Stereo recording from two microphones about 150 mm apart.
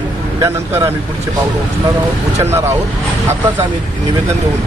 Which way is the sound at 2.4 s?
15° right (ahead or behind).